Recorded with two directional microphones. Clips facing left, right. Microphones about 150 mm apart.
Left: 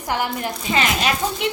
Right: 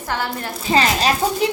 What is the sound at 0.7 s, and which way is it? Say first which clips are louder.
Speech: right 4 dB; 35° right (ahead or behind).